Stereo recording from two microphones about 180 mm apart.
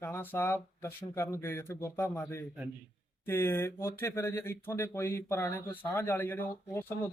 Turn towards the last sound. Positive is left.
turn(degrees=10)  # may be behind; listen again after turning